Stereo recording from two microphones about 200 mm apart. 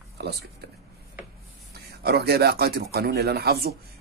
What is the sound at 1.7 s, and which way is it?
A man's voice, 55° right (ahead or behind).